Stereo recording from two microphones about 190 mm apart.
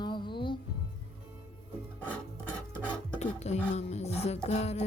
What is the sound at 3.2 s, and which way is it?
Music, 35° left (ahead or behind).